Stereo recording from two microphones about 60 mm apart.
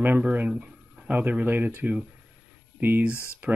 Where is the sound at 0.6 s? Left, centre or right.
Right.